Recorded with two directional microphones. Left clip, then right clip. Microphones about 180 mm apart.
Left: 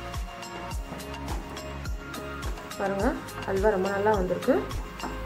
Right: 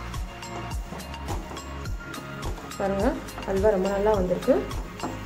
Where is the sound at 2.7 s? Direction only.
Centre (ahead or behind).